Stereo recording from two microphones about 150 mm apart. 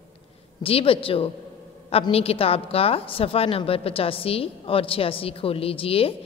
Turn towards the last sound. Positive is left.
turn(degrees=40)  # may be behind; listen again after turning